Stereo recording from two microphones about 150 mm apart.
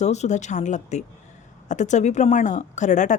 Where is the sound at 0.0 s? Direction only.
50° left (ahead or behind).